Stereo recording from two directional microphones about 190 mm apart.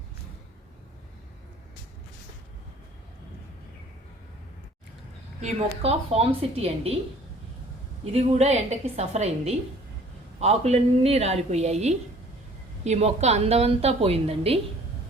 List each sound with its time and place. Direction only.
5.4 s a woman's voice: 35° right (ahead or behind)
8.1 s a woman's voice: 35° right (ahead or behind)